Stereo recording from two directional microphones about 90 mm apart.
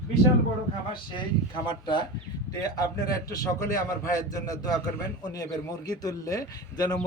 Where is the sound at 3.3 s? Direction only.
35° left (ahead or behind).